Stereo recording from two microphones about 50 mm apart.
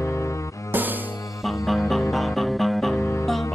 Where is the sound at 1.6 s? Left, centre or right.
Centre.